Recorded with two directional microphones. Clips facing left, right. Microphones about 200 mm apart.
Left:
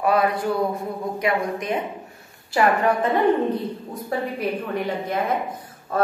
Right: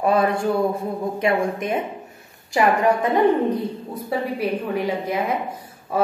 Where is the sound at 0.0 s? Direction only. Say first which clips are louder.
Right 2 dB; 25° right (ahead or behind).